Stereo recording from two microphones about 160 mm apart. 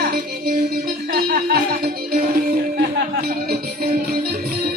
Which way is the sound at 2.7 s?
70° right (ahead or behind).